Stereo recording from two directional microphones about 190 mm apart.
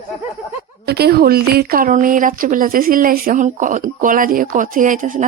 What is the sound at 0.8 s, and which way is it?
Speech, 55° right (ahead or behind).